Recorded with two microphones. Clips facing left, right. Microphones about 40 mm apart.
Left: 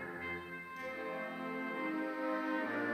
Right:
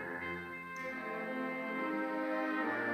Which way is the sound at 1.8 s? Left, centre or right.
Centre.